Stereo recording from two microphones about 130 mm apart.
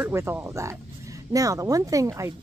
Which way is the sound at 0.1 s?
20° right (ahead or behind).